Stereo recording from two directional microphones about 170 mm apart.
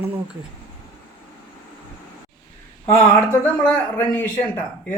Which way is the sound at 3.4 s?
10° left (ahead or behind).